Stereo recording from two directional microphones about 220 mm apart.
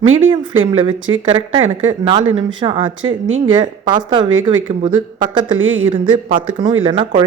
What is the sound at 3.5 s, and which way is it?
Speech, 20° right (ahead or behind).